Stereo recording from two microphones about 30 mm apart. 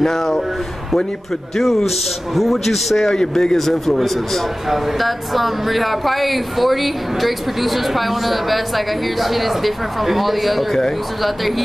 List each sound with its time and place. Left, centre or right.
0.0 s speech: centre
1.9 s speech: centre
3.1 s a man's voice: centre
3.8 s a man's voice: centre
4.6 s speech: centre